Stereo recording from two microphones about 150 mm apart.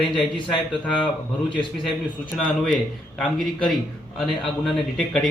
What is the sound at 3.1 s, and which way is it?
A man's voice, 5° left (ahead or behind).